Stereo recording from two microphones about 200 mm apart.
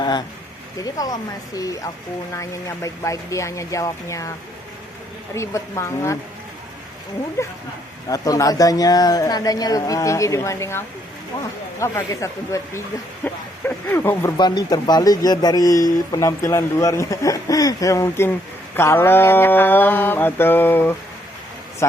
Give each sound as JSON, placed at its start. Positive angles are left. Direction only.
{"t": 0.0, "sound": "speech", "side_deg": 20}
{"t": 5.3, "sound": "speech", "side_deg": 15}
{"t": 8.1, "sound": "speech", "side_deg": 15}